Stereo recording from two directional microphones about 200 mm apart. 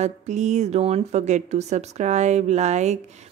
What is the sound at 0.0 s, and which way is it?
Speech, 35° right (ahead or behind).